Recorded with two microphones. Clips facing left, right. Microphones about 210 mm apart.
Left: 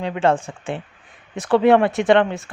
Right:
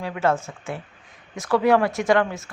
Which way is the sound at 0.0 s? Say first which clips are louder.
Left 4 dB; 25° left (ahead or behind).